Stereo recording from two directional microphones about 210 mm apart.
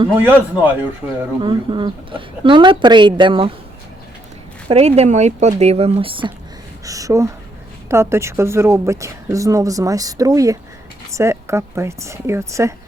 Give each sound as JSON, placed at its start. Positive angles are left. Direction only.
{"t": 0.2, "sound": "a woman's voice", "side_deg": -10}
{"t": 1.4, "sound": "a woman's voice", "side_deg": -20}
{"t": 4.7, "sound": "a woman's voice", "side_deg": -30}